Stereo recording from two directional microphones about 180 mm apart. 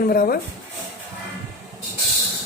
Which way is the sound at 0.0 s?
55° left (ahead or behind).